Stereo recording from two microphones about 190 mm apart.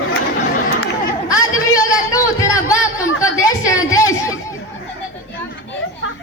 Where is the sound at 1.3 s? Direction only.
15° left (ahead or behind).